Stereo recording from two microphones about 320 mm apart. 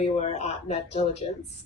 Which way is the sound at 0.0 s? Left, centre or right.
Left.